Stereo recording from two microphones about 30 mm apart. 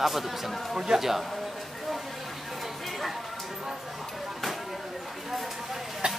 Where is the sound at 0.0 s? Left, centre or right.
Centre.